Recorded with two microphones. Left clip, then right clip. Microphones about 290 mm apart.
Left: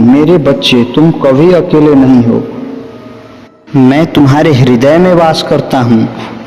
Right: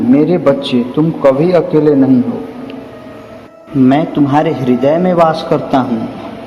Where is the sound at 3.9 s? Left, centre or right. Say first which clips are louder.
Left 4 dB; left.